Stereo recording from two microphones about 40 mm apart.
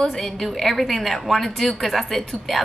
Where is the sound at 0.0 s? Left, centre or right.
Centre.